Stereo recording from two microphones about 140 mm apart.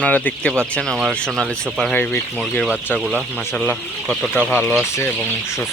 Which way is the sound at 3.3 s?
10° left (ahead or behind).